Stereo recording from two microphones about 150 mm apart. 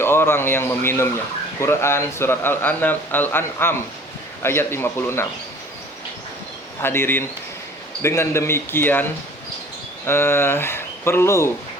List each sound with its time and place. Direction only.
0.0 s speech: 15° left (ahead or behind)
6.8 s speech: 15° left (ahead or behind)
10.1 s speech: 15° left (ahead or behind)